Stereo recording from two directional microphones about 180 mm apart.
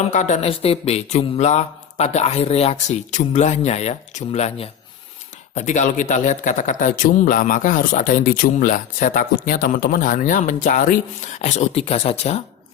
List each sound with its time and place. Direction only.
0.1 s speech: 40° left (ahead or behind)